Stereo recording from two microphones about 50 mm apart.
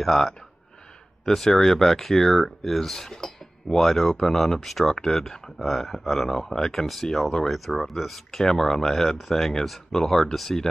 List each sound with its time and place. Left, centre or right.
0.0 s speech: centre